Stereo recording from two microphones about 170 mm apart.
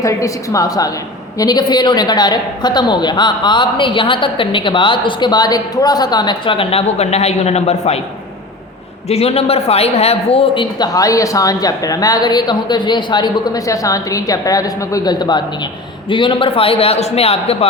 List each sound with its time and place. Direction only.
0.0 s speech: 20° left (ahead or behind); by 7.9 s 40° left (ahead or behind)
9.0 s a man's voice: 35° left (ahead or behind)